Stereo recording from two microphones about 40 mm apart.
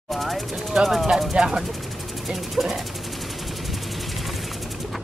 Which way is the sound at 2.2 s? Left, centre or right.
Centre.